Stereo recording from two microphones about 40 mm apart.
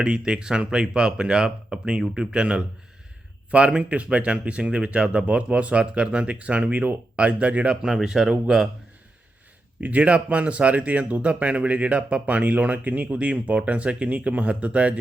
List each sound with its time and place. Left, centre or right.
0.0 s speech: right
7.7 s speech: centre
9.8 s speech: right